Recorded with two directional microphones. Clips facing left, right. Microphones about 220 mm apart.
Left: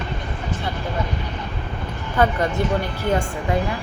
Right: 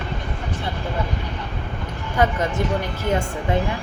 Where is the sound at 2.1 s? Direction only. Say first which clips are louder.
Left 1 dB; 15° right (ahead or behind).